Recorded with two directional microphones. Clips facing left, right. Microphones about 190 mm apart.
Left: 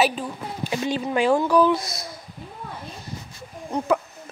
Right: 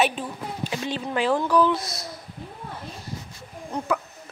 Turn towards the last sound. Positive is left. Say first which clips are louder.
# left 4 dB
turn(degrees=25)  # may be behind; listen again after turning